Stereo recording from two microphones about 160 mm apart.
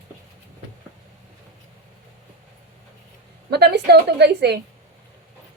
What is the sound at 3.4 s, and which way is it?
A woman's voice, 90° right.